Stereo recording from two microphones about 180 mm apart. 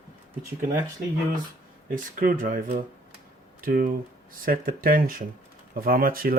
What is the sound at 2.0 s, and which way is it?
Speech, 50° right (ahead or behind).